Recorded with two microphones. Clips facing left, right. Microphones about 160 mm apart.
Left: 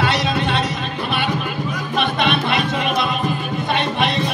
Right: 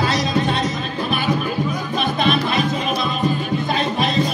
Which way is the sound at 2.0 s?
70° left (ahead or behind).